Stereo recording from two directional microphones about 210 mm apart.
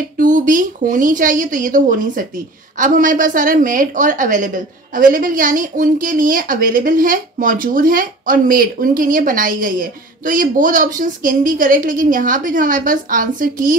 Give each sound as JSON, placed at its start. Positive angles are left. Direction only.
{"t": 0.2, "sound": "a woman's voice", "side_deg": -40}